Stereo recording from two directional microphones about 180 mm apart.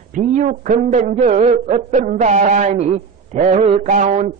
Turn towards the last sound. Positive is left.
turn(degrees=-45)  # may be behind; listen again after turning